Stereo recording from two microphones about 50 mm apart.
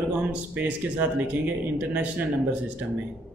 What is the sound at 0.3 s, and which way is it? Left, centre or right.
Speech, right.